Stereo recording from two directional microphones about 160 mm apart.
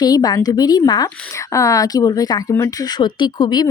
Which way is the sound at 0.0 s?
25° left (ahead or behind).